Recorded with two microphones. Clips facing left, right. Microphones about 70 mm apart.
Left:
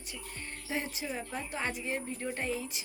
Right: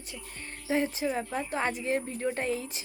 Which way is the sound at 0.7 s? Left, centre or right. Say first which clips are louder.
Right 8 dB; right.